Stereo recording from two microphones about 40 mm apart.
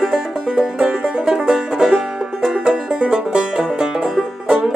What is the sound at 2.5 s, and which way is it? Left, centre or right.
Music, right.